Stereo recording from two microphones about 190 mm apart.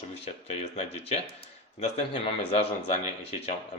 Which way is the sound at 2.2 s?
30° left (ahead or behind).